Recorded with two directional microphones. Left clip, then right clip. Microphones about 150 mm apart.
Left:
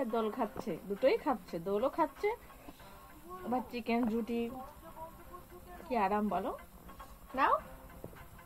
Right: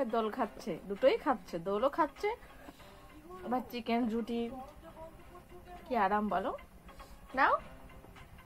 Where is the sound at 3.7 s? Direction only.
15° left (ahead or behind).